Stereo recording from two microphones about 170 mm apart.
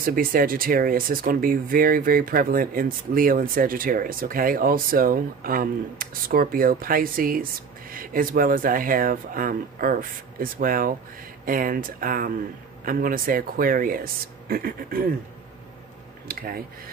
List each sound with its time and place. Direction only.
0.0 s speech: 55° right (ahead or behind)
16.3 s speech: 60° right (ahead or behind)